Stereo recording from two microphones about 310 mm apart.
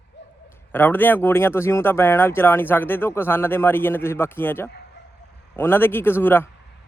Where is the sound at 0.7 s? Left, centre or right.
Centre.